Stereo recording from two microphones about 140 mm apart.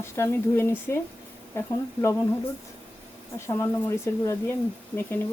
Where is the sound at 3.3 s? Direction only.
20° left (ahead or behind).